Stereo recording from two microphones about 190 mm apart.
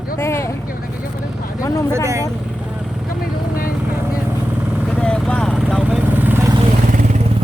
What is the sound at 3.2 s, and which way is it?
Vehicle, 50° left (ahead or behind).